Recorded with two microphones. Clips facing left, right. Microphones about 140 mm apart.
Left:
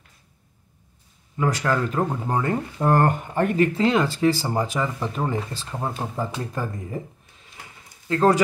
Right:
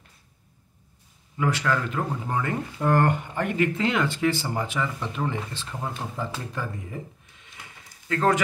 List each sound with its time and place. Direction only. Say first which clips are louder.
1.4 s speech: left 2 dB; 40° left (ahead or behind)
8.1 s speech: left 4 dB; 30° left (ahead or behind)